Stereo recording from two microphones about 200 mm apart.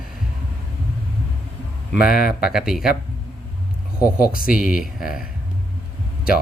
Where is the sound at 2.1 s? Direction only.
45° left (ahead or behind).